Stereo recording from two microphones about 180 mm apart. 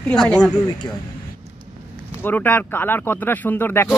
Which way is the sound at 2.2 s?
10° left (ahead or behind).